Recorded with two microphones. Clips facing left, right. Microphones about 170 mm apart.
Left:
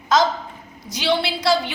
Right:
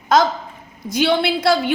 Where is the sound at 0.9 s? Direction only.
55° right (ahead or behind).